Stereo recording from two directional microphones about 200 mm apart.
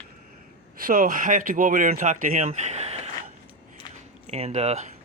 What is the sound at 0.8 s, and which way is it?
Speech, 45° right (ahead or behind).